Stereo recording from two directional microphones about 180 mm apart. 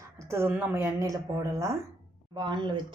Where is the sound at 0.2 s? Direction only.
15° right (ahead or behind).